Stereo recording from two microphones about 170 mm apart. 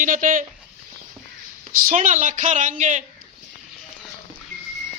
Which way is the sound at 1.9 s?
45° right (ahead or behind).